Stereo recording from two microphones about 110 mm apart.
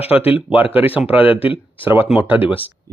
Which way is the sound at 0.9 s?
15° right (ahead or behind).